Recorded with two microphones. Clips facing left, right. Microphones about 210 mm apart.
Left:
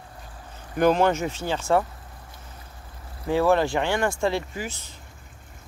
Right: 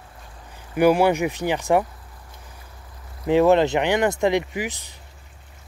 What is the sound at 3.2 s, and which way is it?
Speech, 20° right (ahead or behind).